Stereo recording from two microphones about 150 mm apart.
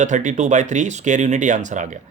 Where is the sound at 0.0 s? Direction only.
55° right (ahead or behind).